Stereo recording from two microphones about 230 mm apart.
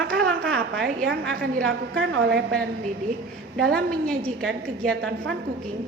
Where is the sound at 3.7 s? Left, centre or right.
Centre.